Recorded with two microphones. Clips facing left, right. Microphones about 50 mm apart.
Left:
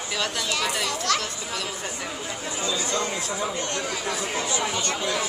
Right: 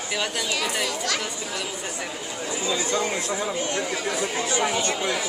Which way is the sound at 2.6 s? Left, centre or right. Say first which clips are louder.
Right 2 dB; centre.